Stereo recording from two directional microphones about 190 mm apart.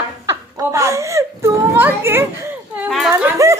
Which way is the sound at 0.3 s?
15° right (ahead or behind).